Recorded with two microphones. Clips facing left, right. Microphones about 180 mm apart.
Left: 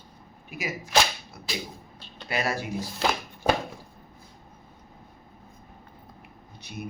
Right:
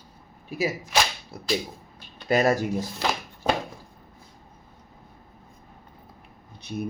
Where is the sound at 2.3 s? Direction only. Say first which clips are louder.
Right 8 dB; 45° right (ahead or behind).